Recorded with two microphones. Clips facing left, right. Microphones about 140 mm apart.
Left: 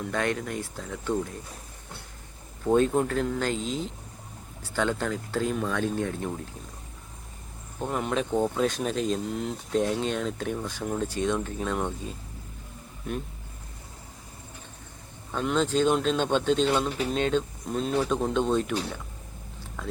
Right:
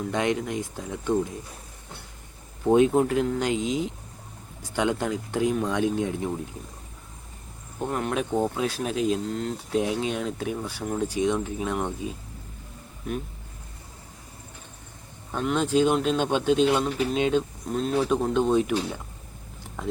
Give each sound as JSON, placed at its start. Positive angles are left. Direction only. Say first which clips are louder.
{"t": 0.1, "sound": "speech", "louder": "right 3 dB", "side_deg": -15}
{"t": 2.6, "sound": "speech", "louder": "right 3 dB", "side_deg": -10}
{"t": 7.9, "sound": "speech", "louder": "right 1 dB", "side_deg": 0}
{"t": 9.2, "sound": "speech", "louder": "right 2 dB", "side_deg": 5}
{"t": 9.7, "sound": "speech", "louder": "even", "side_deg": -10}
{"t": 15.3, "sound": "speech", "louder": "right 1 dB", "side_deg": -5}
{"t": 19.8, "sound": "speech", "louder": "right 4 dB", "side_deg": -20}